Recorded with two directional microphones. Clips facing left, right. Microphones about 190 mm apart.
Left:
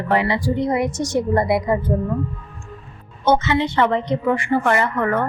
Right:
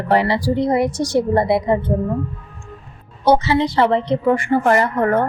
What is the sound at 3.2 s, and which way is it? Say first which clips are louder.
A woman's voice: right 2 dB; 35° right (ahead or behind).